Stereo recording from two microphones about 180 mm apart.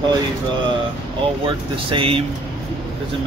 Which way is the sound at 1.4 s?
30° right (ahead or behind).